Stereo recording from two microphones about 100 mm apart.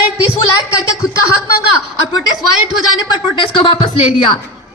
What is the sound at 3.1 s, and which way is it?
Speech, 55° left (ahead or behind).